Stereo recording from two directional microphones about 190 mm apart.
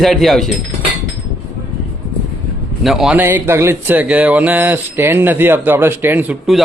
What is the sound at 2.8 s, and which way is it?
Speech, centre (ahead or behind).